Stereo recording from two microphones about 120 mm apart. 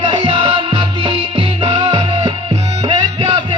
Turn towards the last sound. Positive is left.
turn(degrees=-40)  # may be behind; listen again after turning